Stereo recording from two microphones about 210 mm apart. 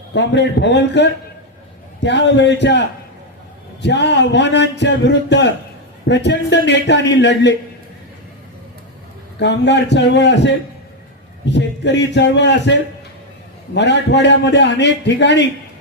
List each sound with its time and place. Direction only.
0.1 s a man's voice: 55° left (ahead or behind)
9.4 s a man's voice: 55° left (ahead or behind)